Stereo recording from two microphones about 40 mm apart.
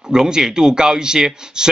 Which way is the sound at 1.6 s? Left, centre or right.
Centre.